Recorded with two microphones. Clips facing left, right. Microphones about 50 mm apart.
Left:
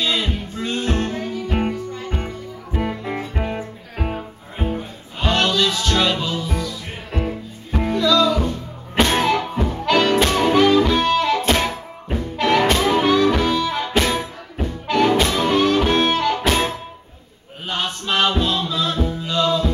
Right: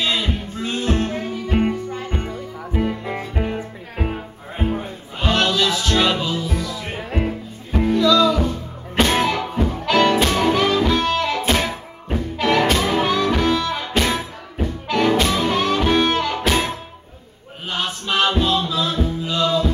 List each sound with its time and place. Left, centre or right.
0.0 s music: centre
3.0 s music: centre
7.1 s music: right
7.7 s music: centre